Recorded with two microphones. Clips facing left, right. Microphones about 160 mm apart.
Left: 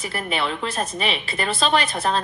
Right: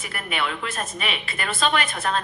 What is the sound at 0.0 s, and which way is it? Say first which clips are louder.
A woman's voice: left 3 dB; 30° left (ahead or behind).